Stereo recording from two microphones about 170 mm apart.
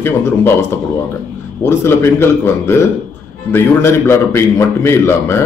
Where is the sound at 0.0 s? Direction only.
15° left (ahead or behind).